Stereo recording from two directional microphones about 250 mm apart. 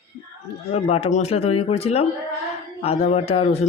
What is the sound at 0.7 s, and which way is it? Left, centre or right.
Speech, left.